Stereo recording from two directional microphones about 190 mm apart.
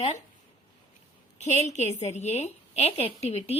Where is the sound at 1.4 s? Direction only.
35° left (ahead or behind).